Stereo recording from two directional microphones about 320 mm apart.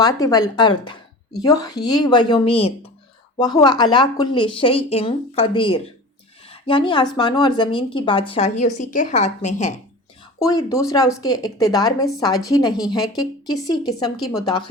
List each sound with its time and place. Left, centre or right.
0.0 s speech: centre
10.4 s speech: centre